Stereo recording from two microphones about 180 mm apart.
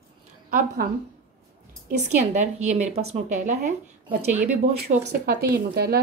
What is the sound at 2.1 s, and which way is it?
Speech, 40° right (ahead or behind).